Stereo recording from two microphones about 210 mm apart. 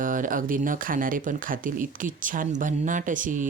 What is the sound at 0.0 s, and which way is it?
Speech, 40° right (ahead or behind).